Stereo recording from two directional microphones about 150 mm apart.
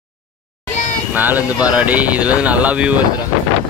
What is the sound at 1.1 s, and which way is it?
Speech, 10° right (ahead or behind).